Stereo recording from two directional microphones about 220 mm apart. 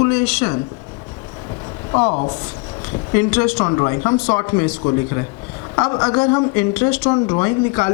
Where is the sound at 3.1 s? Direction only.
10° left (ahead or behind).